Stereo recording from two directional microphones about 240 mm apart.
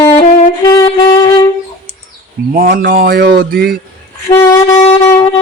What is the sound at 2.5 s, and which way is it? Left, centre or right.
Mantra, right.